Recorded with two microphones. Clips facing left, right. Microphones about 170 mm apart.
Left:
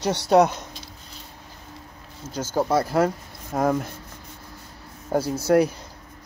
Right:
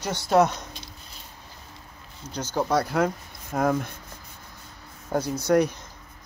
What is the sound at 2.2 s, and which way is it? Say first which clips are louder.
Speech: left 2 dB; 25° left (ahead or behind).